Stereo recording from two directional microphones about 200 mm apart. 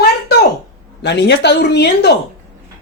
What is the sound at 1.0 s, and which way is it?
Speech, 60° left (ahead or behind).